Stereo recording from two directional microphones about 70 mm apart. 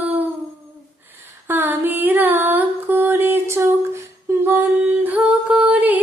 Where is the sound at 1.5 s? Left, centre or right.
Right.